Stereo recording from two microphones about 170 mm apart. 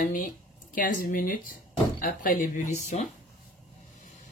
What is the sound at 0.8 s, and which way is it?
Speech, 50° left (ahead or behind).